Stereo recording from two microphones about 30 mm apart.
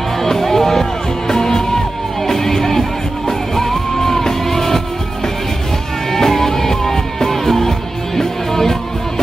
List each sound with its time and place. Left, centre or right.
0.2 s music: centre
6.1 s music: centre